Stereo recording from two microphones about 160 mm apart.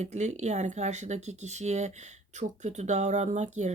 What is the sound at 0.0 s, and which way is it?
Speech, 45° right (ahead or behind).